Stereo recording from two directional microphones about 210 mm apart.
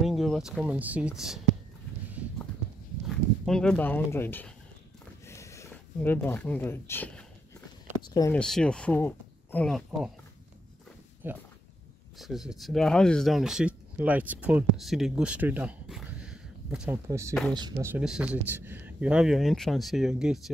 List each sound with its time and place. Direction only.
0.0 s speech: centre (ahead or behind)
3.4 s speech: 5° left (ahead or behind)
5.2 s a sound: 15° left (ahead or behind)
8.1 s speech: 15° left (ahead or behind)
8.4 s speech: 5° left (ahead or behind)
11.2 s speech: 10° right (ahead or behind)
17.6 s speech: 15° right (ahead or behind)